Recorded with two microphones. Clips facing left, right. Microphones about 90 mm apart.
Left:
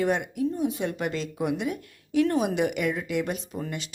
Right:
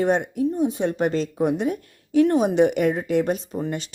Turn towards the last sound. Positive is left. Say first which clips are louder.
# right 6 dB
turn(degrees=-35)  # may be behind; listen again after turning